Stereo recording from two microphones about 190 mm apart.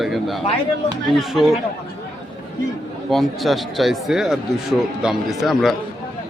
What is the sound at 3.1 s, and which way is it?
Speech, centre (ahead or behind).